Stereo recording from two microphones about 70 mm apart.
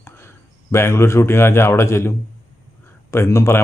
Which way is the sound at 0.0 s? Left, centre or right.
Left.